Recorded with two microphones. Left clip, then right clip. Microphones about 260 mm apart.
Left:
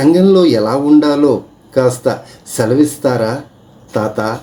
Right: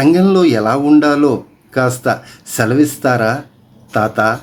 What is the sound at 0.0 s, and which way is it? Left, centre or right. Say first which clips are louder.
Speech: left 2 dB; right.